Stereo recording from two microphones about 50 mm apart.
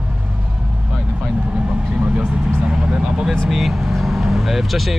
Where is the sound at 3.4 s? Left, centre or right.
Centre.